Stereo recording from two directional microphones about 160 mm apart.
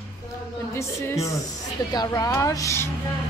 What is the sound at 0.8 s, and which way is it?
Speech, 15° left (ahead or behind).